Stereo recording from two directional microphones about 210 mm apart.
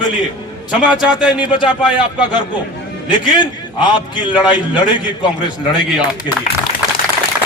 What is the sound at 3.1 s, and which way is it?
A man's voice, 20° left (ahead or behind).